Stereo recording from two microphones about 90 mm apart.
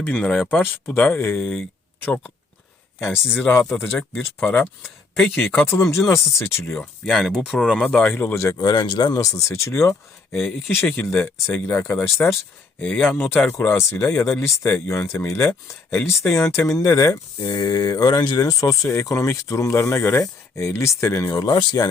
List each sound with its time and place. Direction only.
0.0 s speech: 15° left (ahead or behind)
3.0 s speech: 20° left (ahead or behind)
3.8 s speech: 5° left (ahead or behind)
4.4 s speech: 25° left (ahead or behind)
7.0 s speech: 5° left (ahead or behind)
7.9 s speech: 20° left (ahead or behind)
8.4 s speech: 45° left (ahead or behind)
10.8 s speech: 20° left (ahead or behind)
12.8 s speech: 15° left (ahead or behind)
13.5 s speech: 30° left (ahead or behind)
14.2 s speech: 15° left (ahead or behind)
14.8 s speech: 35° left (ahead or behind)
17.4 s speech: 50° left (ahead or behind)
19.8 s speech: 25° left (ahead or behind); by 21.9 s 50° left (ahead or behind)